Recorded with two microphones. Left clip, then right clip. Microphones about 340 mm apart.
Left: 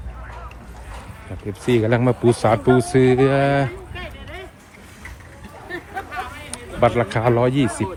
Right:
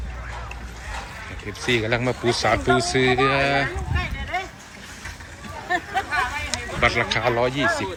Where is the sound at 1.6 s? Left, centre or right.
Centre.